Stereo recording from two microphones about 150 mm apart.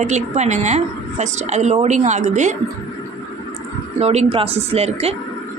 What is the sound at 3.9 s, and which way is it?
A woman's voice, 45° right (ahead or behind).